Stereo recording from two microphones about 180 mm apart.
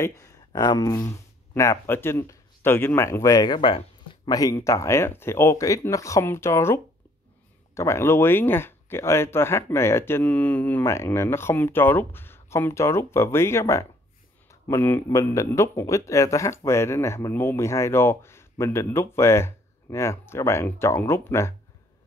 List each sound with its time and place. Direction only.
0.0 s speech: 20° left (ahead or behind)